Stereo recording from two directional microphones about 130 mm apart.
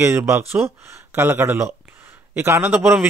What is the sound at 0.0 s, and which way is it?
Speech, 20° right (ahead or behind).